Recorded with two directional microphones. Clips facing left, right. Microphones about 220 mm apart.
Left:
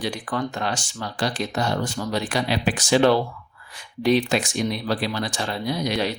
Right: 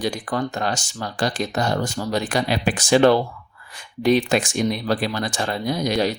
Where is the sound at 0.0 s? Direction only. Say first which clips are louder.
Right 3 dB; 40° right (ahead or behind).